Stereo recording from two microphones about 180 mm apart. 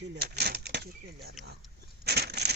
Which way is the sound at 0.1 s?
60° right (ahead or behind).